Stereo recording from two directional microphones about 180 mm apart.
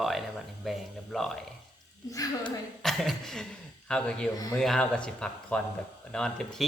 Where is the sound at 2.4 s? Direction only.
Centre (ahead or behind).